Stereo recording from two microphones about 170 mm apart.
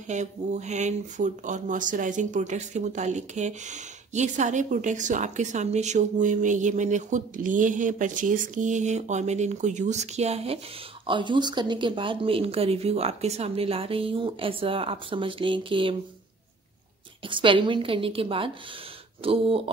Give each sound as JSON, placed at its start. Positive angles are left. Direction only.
{"t": 0.1, "sound": "a woman's voice", "side_deg": -45}
{"t": 17.3, "sound": "a woman's voice", "side_deg": -30}